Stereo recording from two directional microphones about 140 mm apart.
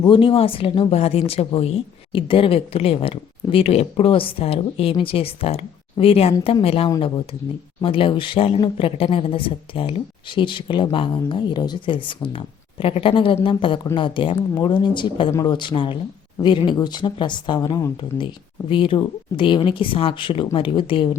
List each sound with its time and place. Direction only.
0.0 s speech: 35° left (ahead or behind)
18.7 s speech: 40° left (ahead or behind)